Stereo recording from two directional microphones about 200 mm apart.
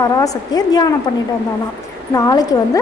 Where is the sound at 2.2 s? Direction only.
20° left (ahead or behind).